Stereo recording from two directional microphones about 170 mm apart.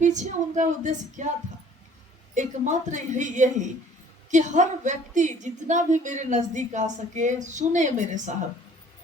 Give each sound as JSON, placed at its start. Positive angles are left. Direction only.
{"t": 0.0, "sound": "a woman's voice", "side_deg": -45}
{"t": 2.3, "sound": "a woman's voice", "side_deg": -45}